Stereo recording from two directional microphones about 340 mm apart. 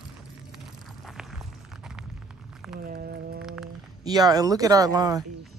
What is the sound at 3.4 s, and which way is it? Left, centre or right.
Speech, centre.